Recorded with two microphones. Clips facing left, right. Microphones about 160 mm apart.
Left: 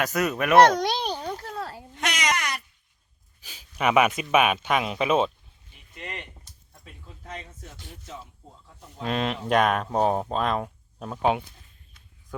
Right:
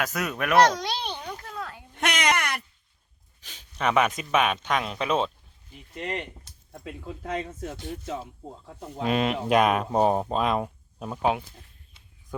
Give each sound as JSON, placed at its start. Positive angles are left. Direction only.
{"t": 0.0, "sound": "speech", "side_deg": 0}
{"t": 0.6, "sound": "a sound", "side_deg": 50}
{"t": 2.0, "sound": "a sound", "side_deg": -55}
{"t": 3.4, "sound": "speech", "side_deg": 10}
{"t": 6.0, "sound": "speech", "side_deg": -45}
{"t": 6.8, "sound": "speech", "side_deg": -80}
{"t": 9.0, "sound": "speech", "side_deg": -5}
{"t": 12.3, "sound": "speech", "side_deg": -20}